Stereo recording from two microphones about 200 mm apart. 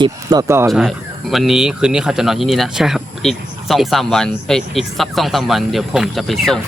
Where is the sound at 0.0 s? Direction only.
20° right (ahead or behind).